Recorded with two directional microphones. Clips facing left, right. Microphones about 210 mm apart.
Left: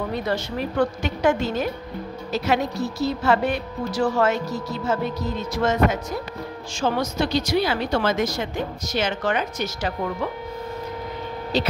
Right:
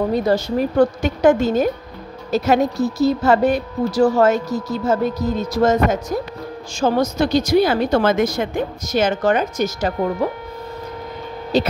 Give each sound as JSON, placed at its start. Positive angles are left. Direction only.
{"t": 0.1, "sound": "a woman's voice", "side_deg": -40}
{"t": 11.5, "sound": "a woman's voice", "side_deg": -50}